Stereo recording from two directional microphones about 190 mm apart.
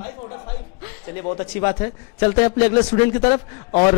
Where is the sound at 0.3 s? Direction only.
15° left (ahead or behind).